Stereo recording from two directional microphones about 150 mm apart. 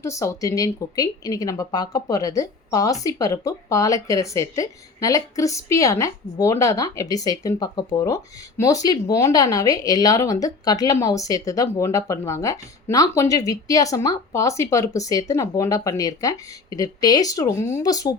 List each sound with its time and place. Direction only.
0.0 s speech: 20° left (ahead or behind)